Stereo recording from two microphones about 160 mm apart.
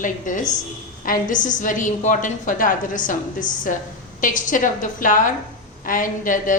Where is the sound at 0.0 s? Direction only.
55° left (ahead or behind).